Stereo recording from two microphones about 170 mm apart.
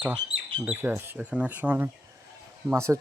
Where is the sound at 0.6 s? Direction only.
10° right (ahead or behind).